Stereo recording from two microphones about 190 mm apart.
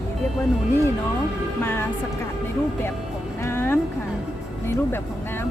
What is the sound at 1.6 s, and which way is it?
Speech, 10° left (ahead or behind).